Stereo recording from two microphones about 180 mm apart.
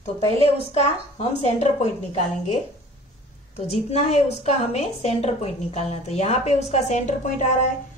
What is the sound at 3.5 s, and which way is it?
A woman's voice, 35° left (ahead or behind).